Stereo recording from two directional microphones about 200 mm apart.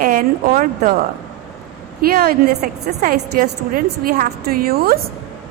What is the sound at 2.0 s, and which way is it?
A woman's voice, 45° right (ahead or behind).